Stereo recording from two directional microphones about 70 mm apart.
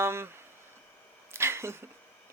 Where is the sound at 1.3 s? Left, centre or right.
Right.